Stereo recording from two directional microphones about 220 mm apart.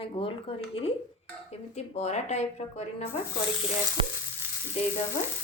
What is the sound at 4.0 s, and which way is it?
Frying, 25° right (ahead or behind).